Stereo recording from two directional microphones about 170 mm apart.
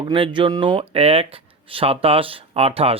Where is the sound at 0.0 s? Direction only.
30° right (ahead or behind).